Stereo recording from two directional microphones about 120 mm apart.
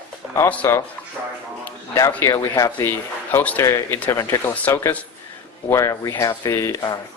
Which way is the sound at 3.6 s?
25° left (ahead or behind).